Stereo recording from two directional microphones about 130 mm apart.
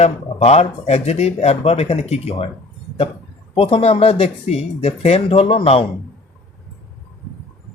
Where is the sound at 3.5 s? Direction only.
50° left (ahead or behind).